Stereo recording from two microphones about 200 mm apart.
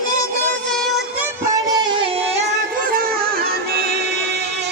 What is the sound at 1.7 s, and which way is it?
Music, 25° right (ahead or behind).